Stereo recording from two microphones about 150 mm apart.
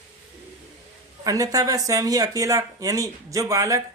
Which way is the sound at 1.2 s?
25° right (ahead or behind).